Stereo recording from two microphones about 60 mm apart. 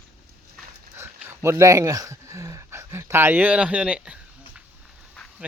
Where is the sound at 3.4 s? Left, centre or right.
Right.